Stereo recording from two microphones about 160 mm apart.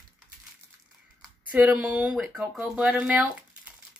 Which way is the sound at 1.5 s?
5° right (ahead or behind).